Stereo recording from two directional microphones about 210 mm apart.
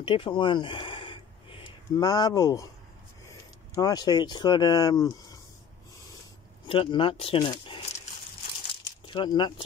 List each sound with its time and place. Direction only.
0.0 s speech: 25° left (ahead or behind)
6.7 s speech: 25° left (ahead or behind)